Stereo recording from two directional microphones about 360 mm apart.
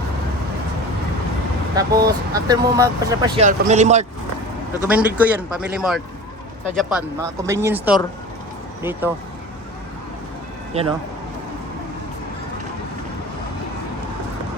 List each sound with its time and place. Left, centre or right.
1.7 s speech: centre
4.9 s speech: centre
10.7 s speech: centre